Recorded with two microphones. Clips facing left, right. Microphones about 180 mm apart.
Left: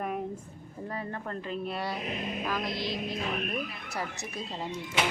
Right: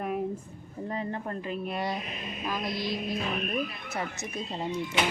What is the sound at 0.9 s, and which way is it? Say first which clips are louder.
Speech: right 3 dB; 20° right (ahead or behind).